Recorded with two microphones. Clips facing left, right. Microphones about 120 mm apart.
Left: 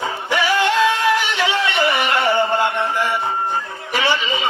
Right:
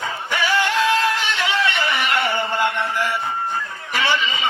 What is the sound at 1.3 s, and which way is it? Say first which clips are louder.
Music: left 2 dB; 15° left (ahead or behind).